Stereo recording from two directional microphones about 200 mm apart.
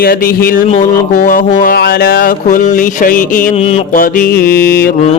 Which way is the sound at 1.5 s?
50° left (ahead or behind).